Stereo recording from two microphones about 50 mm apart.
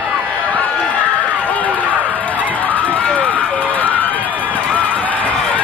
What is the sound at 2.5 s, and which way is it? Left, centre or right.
Run, left.